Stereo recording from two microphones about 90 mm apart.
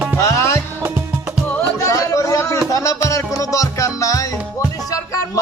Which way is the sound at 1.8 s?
35° left (ahead or behind).